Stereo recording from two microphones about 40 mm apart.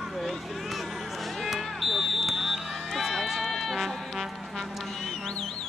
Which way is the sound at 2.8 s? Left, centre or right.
Centre.